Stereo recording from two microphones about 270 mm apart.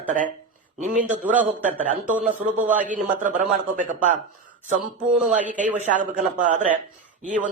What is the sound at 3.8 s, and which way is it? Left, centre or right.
Speech, right.